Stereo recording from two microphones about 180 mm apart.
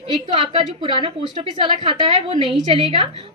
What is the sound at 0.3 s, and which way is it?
A woman's voice, 30° right (ahead or behind).